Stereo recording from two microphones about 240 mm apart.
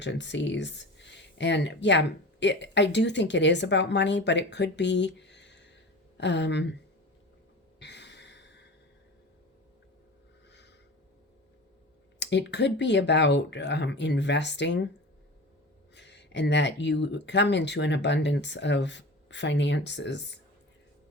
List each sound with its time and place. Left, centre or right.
0.0 s speech: left
7.8 s sigh: left
12.2 s speech: left
16.0 s speech: left